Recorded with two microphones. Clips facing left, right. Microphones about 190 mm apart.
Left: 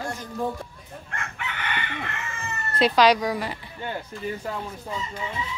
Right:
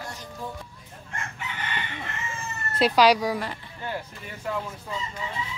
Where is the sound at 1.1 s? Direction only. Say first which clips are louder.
Left 1 dB; 70° left (ahead or behind).